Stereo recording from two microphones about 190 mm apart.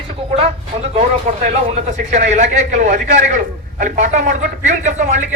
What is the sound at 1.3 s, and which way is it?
A man's voice, 45° right (ahead or behind).